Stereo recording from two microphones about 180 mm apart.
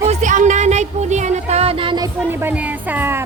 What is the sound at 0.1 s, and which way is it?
Music, 45° right (ahead or behind).